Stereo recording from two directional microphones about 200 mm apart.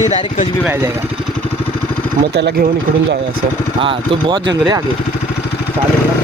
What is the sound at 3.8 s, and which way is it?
Speech, 25° right (ahead or behind).